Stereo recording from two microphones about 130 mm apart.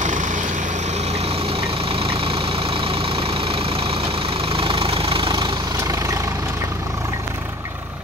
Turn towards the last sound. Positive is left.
turn(degrees=-25)  # may be behind; listen again after turning